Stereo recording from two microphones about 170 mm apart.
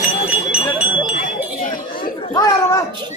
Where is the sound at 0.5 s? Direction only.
5° right (ahead or behind).